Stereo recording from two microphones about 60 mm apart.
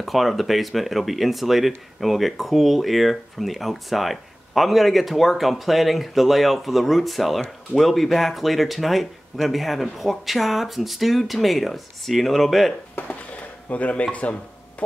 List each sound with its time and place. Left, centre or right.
0.0 s speech: centre
13.1 s dishes: left